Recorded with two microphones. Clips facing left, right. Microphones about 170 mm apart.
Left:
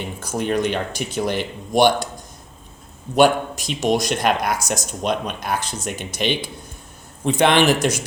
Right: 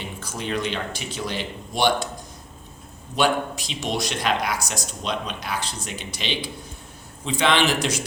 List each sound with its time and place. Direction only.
0.2 s speech: 45° left (ahead or behind)
3.2 s speech: 50° left (ahead or behind)